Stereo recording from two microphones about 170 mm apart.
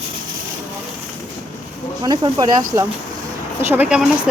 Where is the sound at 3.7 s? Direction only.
10° right (ahead or behind).